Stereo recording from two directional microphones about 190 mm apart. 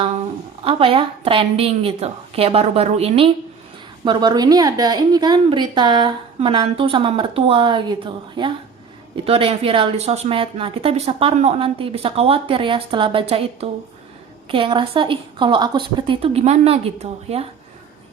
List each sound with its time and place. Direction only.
0.6 s a woman's voice: 30° right (ahead or behind)
4.0 s a woman's voice: 25° right (ahead or behind)